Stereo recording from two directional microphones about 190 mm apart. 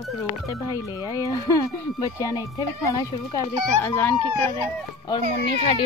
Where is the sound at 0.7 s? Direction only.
20° left (ahead or behind).